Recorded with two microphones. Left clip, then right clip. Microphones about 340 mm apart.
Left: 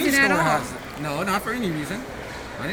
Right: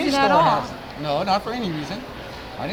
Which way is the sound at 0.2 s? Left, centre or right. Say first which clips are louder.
Right 5 dB; centre.